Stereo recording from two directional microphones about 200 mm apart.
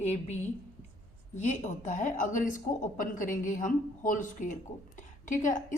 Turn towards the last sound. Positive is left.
turn(degrees=40)  # may be behind; listen again after turning